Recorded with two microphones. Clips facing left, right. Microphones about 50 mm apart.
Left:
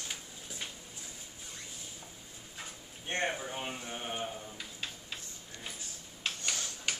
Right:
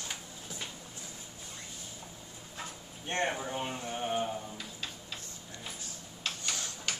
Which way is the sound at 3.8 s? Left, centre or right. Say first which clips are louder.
Right 6 dB; centre.